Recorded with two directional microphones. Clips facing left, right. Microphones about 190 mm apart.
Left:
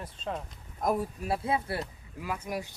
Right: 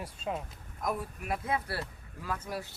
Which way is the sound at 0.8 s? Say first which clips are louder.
Left 6 dB; 35° left (ahead or behind).